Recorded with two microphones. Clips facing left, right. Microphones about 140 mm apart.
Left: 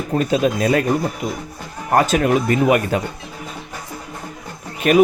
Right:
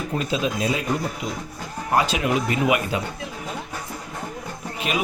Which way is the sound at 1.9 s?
45° left (ahead or behind).